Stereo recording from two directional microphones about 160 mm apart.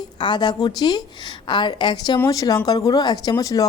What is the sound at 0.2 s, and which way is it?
A woman's voice, 25° left (ahead or behind).